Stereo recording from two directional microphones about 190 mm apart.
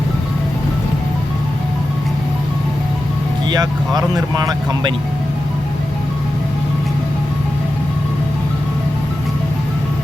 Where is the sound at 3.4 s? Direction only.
20° right (ahead or behind).